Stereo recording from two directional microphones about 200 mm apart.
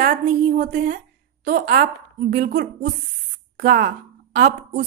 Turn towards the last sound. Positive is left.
turn(degrees=-40)  # may be behind; listen again after turning